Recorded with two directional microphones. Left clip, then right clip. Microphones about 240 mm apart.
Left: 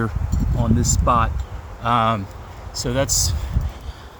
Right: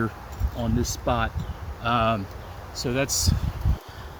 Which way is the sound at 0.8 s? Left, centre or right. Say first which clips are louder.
Left 7 dB; left.